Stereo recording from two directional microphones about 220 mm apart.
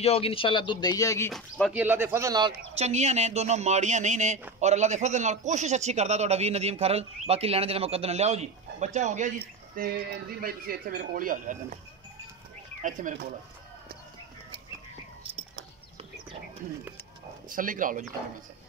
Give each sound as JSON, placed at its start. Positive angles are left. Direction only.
{"t": 0.0, "sound": "speech", "side_deg": 25}
{"t": 1.3, "sound": "speech", "side_deg": -5}
{"t": 2.8, "sound": "speech", "side_deg": -30}
{"t": 9.8, "sound": "speech", "side_deg": -45}
{"t": 12.8, "sound": "speech", "side_deg": -35}
{"t": 17.5, "sound": "speech", "side_deg": -40}